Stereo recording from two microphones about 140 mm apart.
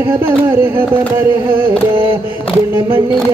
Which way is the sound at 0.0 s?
15° right (ahead or behind).